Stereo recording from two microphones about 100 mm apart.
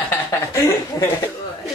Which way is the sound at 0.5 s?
25° left (ahead or behind).